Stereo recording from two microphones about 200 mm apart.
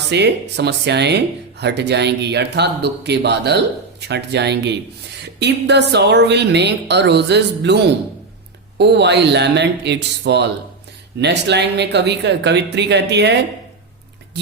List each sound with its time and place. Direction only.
0.1 s speech: 55° right (ahead or behind)
8.8 s speech: 60° right (ahead or behind)